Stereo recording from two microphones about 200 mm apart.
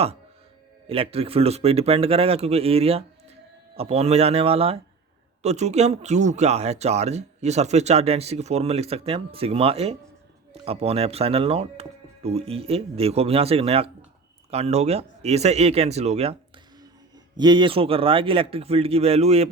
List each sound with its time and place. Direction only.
0.9 s speech: 30° right (ahead or behind)
17.3 s speech: 20° right (ahead or behind)